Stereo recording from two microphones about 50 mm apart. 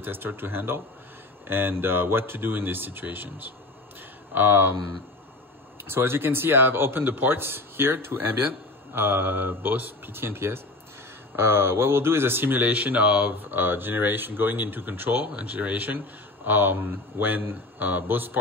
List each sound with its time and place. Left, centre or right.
0.0 s speech: right
5.9 s speech: right
15.2 s speech: right